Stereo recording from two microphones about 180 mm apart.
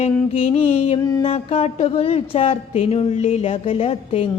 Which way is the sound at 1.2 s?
35° left (ahead or behind).